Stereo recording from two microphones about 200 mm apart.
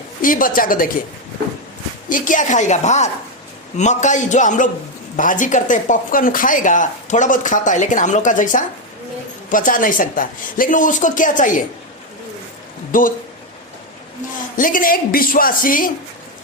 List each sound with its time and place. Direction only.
0.2 s a woman's voice: 45° left (ahead or behind)
2.0 s speech: 40° left (ahead or behind)
12.9 s speech: 40° left (ahead or behind)
14.5 s a woman's voice: 45° left (ahead or behind)